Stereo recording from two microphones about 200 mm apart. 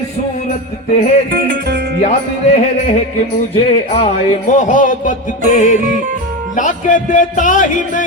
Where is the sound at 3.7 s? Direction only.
30° left (ahead or behind).